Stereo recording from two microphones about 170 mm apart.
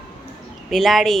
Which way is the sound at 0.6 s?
Centre (ahead or behind).